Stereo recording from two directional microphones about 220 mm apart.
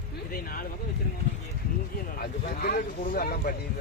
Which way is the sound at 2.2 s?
45° left (ahead or behind).